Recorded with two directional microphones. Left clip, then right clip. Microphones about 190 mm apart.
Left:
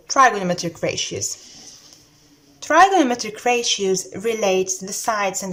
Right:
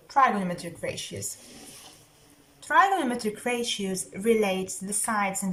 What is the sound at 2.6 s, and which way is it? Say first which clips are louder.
A woman's voice: left 8 dB; 45° left (ahead or behind).